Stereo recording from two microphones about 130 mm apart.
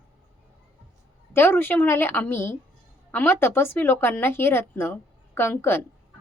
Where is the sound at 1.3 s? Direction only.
15° left (ahead or behind).